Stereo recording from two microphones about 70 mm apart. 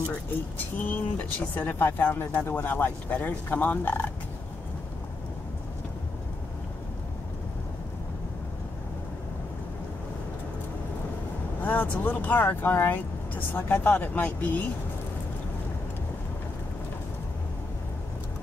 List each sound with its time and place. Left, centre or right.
0.6 s speech: left
11.6 s speech: left